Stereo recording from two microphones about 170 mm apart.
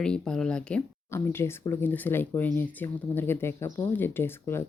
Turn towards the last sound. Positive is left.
turn(degrees=15)  # may be behind; listen again after turning